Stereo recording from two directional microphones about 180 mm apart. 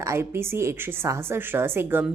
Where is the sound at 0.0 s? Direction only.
15° right (ahead or behind).